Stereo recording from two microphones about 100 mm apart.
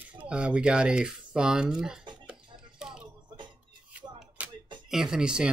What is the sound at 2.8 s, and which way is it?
Music, 5° right (ahead or behind).